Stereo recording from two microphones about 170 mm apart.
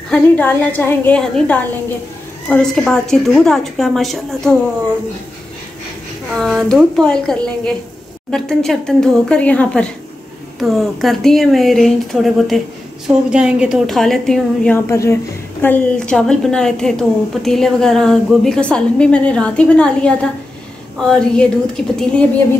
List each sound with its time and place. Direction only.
0.1 s a woman's voice: 10° left (ahead or behind)
6.3 s a woman's voice: centre (ahead or behind)
14.9 s a woman's voice: 15° left (ahead or behind)